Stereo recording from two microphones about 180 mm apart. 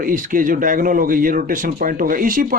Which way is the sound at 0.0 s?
50° right (ahead or behind).